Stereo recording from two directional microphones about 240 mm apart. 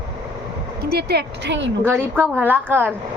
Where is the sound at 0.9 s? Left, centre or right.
Right.